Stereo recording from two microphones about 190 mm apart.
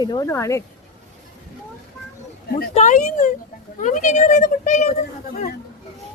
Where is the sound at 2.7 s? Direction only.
40° left (ahead or behind).